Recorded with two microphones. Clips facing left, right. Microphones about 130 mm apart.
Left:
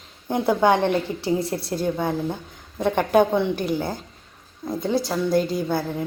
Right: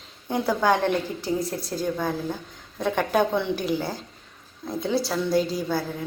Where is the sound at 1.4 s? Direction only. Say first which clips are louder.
Left 3 dB; 65° left (ahead or behind).